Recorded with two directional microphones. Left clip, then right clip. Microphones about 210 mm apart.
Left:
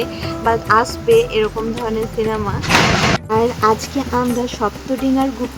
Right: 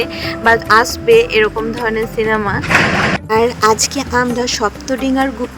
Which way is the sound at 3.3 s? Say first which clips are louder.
Right 5 dB; 35° right (ahead or behind).